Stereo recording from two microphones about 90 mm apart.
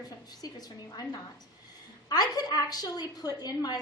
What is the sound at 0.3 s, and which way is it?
A woman's voice, 50° left (ahead or behind).